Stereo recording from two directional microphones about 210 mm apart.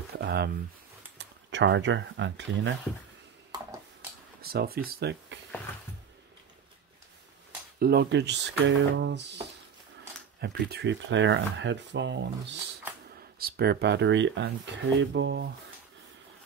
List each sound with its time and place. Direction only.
0.1 s speech: 50° right (ahead or behind)
4.4 s speech: 45° right (ahead or behind)
7.8 s speech: 50° right (ahead or behind)
10.4 s speech: 50° right (ahead or behind)